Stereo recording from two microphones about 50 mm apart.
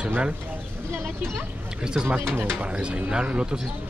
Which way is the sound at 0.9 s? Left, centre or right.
Right.